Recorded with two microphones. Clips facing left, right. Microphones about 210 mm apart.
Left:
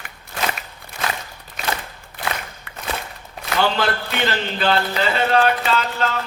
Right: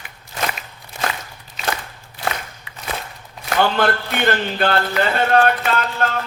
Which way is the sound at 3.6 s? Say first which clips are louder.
Right 3 dB; 55° right (ahead or behind).